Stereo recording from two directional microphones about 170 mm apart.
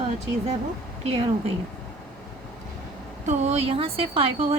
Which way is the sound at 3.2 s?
40° right (ahead or behind).